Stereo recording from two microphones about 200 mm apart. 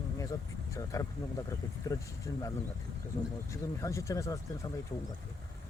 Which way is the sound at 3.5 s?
15° left (ahead or behind).